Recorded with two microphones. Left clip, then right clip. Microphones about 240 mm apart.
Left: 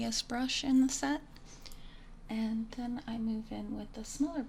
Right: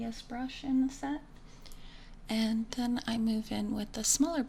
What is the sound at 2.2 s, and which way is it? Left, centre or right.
A woman's voice, right.